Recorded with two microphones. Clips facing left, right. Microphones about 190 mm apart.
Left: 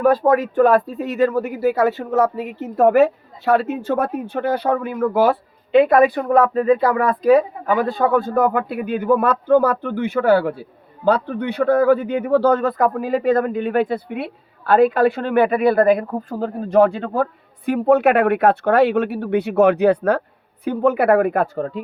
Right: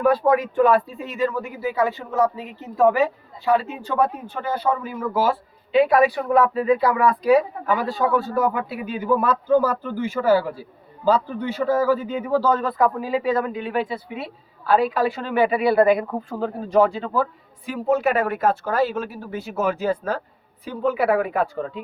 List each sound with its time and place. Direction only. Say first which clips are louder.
0.0 s speech: left 3 dB; 40° left (ahead or behind)
1.4 s speech: left 6 dB; 70° left (ahead or behind)
4.0 s speech: left 3 dB; 65° left (ahead or behind); by 16.5 s 45° left (ahead or behind)
16.6 s speech: left 4 dB; 55° left (ahead or behind)
20.7 s speech: left 5 dB; 50° left (ahead or behind)